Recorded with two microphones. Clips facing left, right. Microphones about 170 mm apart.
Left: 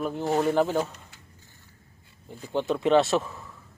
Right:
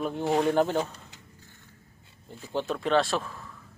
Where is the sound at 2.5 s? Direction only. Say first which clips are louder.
Left 4 dB; 20° left (ahead or behind).